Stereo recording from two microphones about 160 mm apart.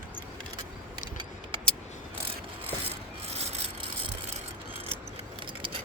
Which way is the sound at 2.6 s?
40° right (ahead or behind).